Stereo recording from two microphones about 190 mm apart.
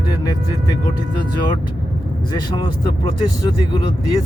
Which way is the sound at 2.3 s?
25° left (ahead or behind).